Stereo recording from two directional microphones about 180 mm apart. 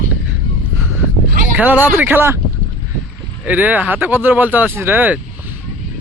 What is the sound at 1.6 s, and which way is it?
Speech, 10° right (ahead or behind).